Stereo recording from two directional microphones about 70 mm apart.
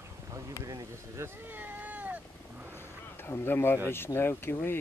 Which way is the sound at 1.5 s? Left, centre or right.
Right.